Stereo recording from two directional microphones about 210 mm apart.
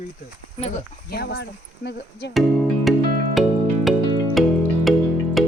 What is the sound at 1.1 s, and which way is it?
Speech, 50° left (ahead or behind).